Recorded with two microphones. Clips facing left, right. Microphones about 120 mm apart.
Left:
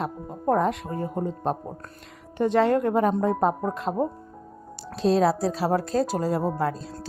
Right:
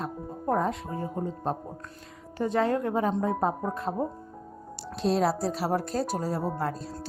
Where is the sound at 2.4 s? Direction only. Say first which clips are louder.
Left 5 dB; 80° left; by 3.1 s 65° left (ahead or behind).